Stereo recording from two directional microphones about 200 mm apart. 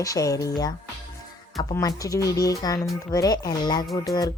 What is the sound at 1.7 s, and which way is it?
Speech, 15° left (ahead or behind).